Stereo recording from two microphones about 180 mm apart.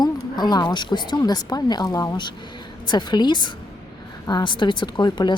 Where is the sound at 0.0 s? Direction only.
25° left (ahead or behind).